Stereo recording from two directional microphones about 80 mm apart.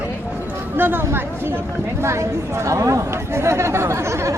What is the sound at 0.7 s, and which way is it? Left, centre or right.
Speech, right.